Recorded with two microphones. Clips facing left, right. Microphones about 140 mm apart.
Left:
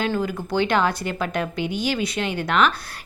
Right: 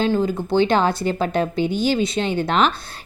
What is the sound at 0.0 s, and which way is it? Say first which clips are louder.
A woman's voice: right 5 dB; 25° right (ahead or behind).